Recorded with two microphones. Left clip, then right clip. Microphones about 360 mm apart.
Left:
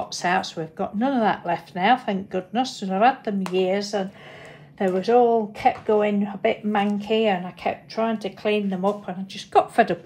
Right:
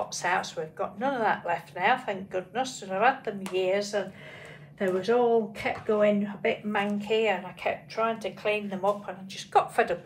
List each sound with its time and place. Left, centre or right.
0.1 s speech: left